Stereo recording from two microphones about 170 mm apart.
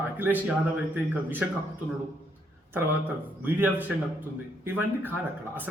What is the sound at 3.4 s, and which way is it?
Speech, 10° right (ahead or behind).